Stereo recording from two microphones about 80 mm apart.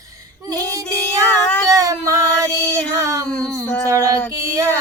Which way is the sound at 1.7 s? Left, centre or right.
Right.